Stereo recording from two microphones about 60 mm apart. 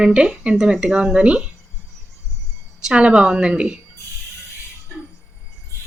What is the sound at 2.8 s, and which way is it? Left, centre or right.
Speech, centre.